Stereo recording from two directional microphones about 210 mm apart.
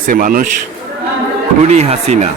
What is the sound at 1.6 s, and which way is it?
Speech, 30° right (ahead or behind).